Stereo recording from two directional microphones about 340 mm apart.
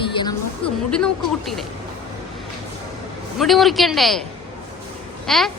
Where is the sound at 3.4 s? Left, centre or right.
Centre.